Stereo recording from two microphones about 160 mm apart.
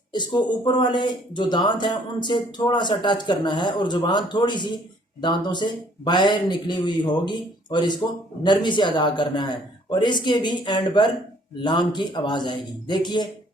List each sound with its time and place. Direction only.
0.1 s speech: 30° left (ahead or behind)